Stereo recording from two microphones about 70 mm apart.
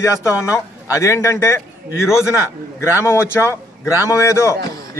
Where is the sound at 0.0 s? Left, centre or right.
Left.